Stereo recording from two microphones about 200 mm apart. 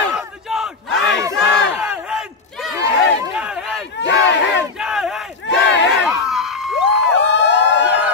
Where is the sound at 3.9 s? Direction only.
60° left (ahead or behind).